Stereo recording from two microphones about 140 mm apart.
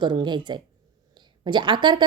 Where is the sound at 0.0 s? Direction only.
30° right (ahead or behind).